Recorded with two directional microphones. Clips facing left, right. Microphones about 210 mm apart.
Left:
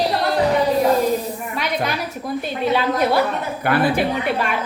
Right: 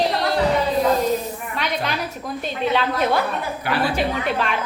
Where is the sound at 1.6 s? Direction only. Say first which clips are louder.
Left 1 dB; 10° left (ahead or behind).